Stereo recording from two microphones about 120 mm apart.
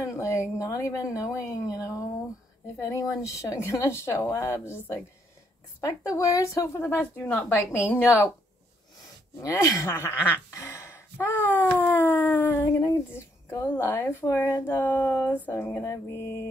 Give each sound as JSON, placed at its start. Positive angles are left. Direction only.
{"t": 0.0, "sound": "speech", "side_deg": 25}
{"t": 6.1, "sound": "speech", "side_deg": 25}
{"t": 9.4, "sound": "speech", "side_deg": 25}